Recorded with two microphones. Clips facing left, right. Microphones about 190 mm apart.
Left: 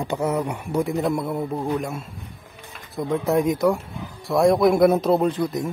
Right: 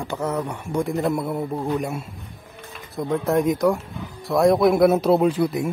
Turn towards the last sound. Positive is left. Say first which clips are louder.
# right 2 dB
turn(degrees=-10)  # may be behind; listen again after turning